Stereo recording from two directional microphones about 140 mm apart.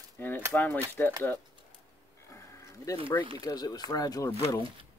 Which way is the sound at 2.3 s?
20° left (ahead or behind).